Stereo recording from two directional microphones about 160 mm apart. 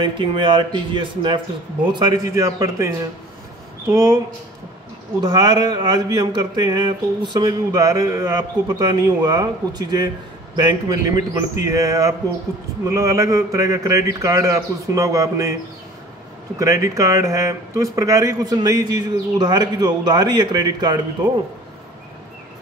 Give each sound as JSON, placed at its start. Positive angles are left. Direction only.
{"t": 0.0, "sound": "speech", "side_deg": -30}
{"t": 3.9, "sound": "speech", "side_deg": -20}
{"t": 5.2, "sound": "speech", "side_deg": -25}
{"t": 16.5, "sound": "speech", "side_deg": -20}